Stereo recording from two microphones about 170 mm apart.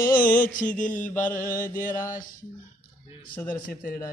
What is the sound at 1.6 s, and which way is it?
Speech, 55° left (ahead or behind).